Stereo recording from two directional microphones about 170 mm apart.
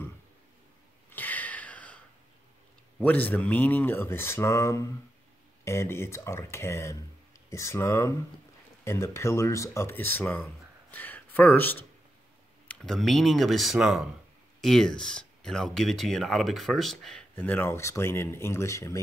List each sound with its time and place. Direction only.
1.1 s sniff: 10° left (ahead or behind)
3.0 s speech: 10° left (ahead or behind)